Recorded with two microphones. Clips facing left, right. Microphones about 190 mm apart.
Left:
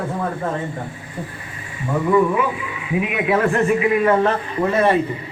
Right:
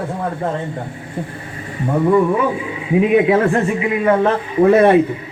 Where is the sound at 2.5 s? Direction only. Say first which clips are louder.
Right 6 dB; 35° right (ahead or behind); by 4.1 s 20° right (ahead or behind).